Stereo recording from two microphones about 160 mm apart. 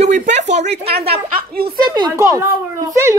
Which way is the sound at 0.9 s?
80° right.